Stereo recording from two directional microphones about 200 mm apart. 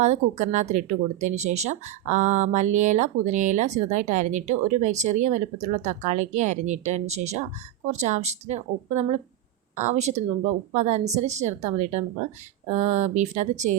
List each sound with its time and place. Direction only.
0.0 s speech: 35° right (ahead or behind)